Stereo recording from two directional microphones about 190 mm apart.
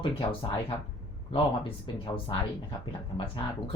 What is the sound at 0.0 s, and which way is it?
Speech, 25° left (ahead or behind).